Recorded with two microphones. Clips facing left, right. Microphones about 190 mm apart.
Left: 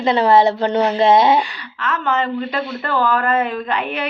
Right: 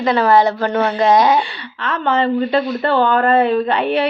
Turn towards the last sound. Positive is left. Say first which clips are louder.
# right 6 dB
turn(degrees=-30)  # may be behind; listen again after turning